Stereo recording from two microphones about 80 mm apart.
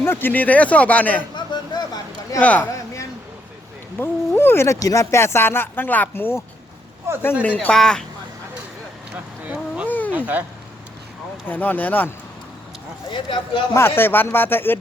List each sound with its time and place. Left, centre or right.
0.0 s speech: left
1.4 s a sound: left
2.4 s speech: centre
3.9 s speech: left
7.1 s speech: right
7.4 s speech: centre
7.7 s speech: centre
9.1 s a sound: centre
11.4 s speech: left
13.1 s speech: left
13.7 s speech: left